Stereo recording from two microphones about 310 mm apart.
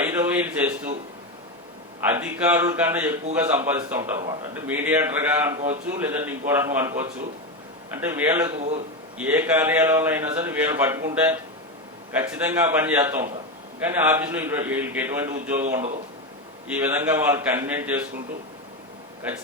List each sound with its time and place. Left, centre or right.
0.0 s a man's voice: centre
2.0 s a man's voice: centre
16.6 s a man's voice: centre